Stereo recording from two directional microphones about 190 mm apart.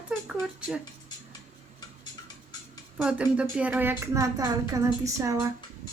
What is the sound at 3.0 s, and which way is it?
A woman's voice, 5° right (ahead or behind).